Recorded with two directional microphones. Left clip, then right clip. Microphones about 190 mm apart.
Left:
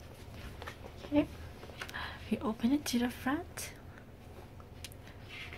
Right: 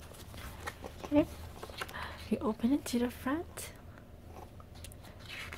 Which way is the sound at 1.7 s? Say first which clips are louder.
Even; 25° right (ahead or behind).